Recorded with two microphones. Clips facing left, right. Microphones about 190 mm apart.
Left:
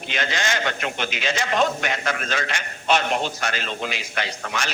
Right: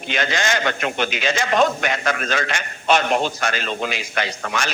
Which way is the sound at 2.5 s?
55° right (ahead or behind).